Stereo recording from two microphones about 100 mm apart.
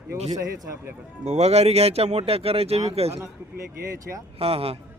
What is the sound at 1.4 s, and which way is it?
Speech, 90° right.